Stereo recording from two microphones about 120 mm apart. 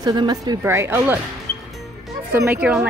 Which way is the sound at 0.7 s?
20° right (ahead or behind).